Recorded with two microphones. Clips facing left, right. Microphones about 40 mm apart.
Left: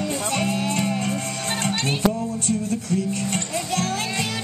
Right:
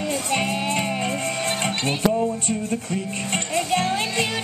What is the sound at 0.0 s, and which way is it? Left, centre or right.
Music, right.